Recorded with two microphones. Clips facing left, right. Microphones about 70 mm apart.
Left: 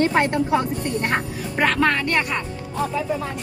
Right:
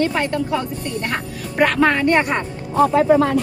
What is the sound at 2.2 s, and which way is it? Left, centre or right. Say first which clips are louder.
Speech: right 4 dB; right.